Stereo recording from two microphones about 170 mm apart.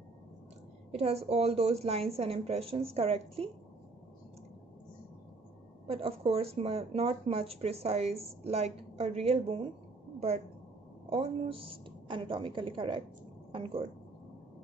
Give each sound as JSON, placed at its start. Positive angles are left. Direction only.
{"t": 0.9, "sound": "speech", "side_deg": -35}
{"t": 5.9, "sound": "speech", "side_deg": -35}
{"t": 11.1, "sound": "a woman's voice", "side_deg": -35}